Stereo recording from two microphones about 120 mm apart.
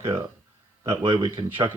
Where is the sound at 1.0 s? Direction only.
45° right (ahead or behind).